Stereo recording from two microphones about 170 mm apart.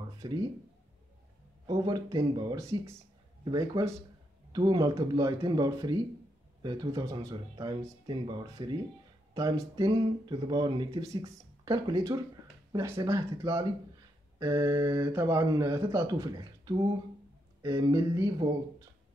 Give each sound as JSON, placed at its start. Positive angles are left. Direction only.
{"t": 0.2, "sound": "speech", "side_deg": -25}
{"t": 1.7, "sound": "speech", "side_deg": -25}